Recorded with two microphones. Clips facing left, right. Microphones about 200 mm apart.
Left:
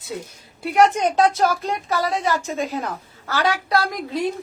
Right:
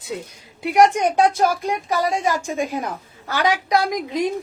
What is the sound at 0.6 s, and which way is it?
A woman's voice, 15° right (ahead or behind).